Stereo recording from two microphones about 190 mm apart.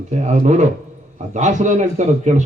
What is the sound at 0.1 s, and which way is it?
A man's voice, 40° right (ahead or behind).